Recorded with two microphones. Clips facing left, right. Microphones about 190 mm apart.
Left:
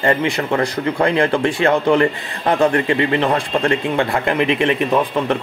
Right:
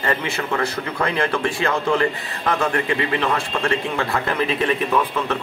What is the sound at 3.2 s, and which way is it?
Speech, 30° left (ahead or behind).